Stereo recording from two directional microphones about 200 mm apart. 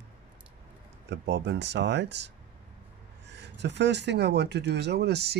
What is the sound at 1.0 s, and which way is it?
Speech, 60° right (ahead or behind).